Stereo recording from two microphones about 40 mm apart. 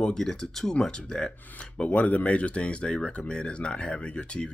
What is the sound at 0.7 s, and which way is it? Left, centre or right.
Speech, left.